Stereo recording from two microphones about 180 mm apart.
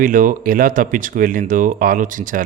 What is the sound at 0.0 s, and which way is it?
Speech, 50° right (ahead or behind).